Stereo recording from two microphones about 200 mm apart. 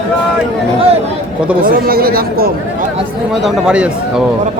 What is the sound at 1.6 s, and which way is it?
Speech, 45° right (ahead or behind).